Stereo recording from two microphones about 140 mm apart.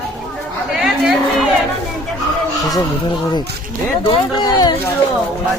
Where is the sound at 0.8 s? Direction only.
Centre (ahead or behind).